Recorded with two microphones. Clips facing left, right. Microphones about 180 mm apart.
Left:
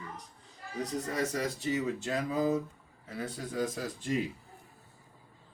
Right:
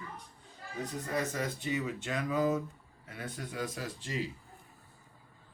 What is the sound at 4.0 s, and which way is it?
Speech, 55° left (ahead or behind).